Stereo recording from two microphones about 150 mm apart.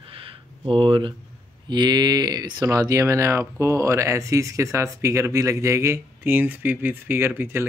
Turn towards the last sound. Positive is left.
turn(degrees=-15)  # may be behind; listen again after turning